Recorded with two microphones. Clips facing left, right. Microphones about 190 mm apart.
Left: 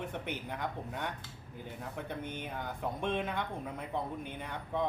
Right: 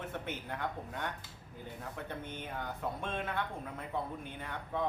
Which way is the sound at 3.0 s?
15° left (ahead or behind).